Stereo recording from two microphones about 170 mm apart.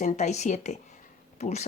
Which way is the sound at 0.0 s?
40° left (ahead or behind).